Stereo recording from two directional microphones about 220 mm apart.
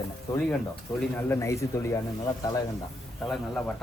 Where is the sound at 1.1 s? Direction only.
10° left (ahead or behind).